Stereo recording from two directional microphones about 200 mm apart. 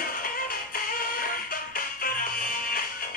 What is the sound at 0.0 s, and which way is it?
Music, 45° left (ahead or behind).